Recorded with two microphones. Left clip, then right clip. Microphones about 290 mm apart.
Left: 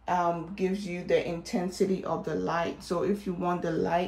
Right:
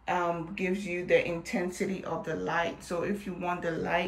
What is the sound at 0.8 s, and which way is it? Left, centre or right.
Speech, left.